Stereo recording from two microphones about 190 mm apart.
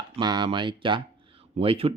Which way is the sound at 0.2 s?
25° right (ahead or behind).